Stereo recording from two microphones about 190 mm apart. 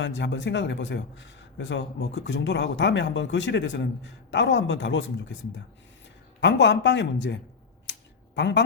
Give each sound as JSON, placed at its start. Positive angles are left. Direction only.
{"t": 0.0, "sound": "a man's voice", "side_deg": 70}
{"t": 6.4, "sound": "a man's voice", "side_deg": 70}
{"t": 7.9, "sound": "a sound", "side_deg": 70}
{"t": 8.4, "sound": "speech", "side_deg": 65}